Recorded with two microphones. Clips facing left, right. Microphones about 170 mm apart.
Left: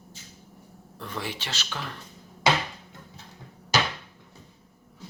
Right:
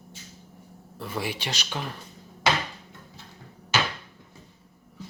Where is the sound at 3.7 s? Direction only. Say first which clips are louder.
Left 1 dB; 40° left (ahead or behind).